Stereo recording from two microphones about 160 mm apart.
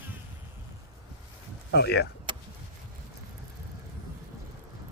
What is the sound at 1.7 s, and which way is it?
Speech, 90° left.